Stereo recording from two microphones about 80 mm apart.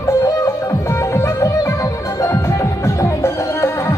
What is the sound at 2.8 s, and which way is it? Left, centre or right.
Music, left.